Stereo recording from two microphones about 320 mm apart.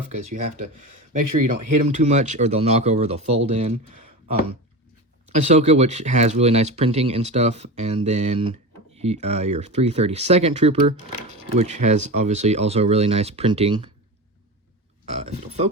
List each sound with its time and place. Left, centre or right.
1.4 s speech: right
2.0 s speech: right
5.3 s speech: right
15.0 s speech: right